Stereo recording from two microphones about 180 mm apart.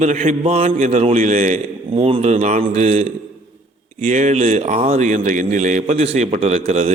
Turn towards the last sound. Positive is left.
turn(degrees=-35)  # may be behind; listen again after turning